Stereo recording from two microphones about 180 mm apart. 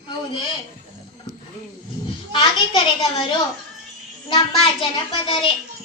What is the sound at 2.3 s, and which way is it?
A woman's voice, 25° left (ahead or behind).